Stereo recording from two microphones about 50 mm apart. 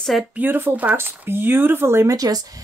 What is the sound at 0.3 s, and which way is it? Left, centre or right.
Speech, right.